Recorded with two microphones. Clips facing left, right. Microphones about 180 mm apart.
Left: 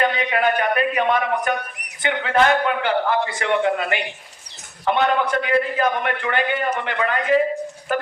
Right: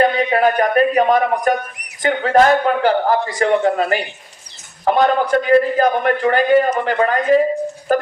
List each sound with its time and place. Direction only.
0.0 s a man's voice: 35° right (ahead or behind)